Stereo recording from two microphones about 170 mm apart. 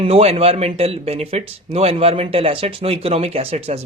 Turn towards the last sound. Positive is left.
turn(degrees=-35)  # may be behind; listen again after turning